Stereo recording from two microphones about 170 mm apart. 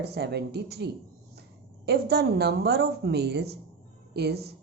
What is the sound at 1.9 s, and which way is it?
A woman's voice, 75° right (ahead or behind).